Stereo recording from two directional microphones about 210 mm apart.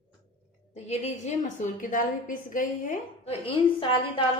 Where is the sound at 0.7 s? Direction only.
30° left (ahead or behind).